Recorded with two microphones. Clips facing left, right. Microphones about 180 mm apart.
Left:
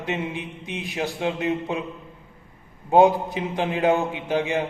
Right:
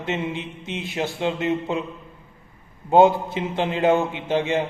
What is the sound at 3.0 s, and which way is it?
Mantra, 15° left (ahead or behind).